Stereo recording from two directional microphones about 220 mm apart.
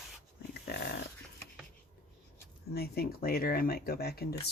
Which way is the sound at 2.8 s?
45° left (ahead or behind).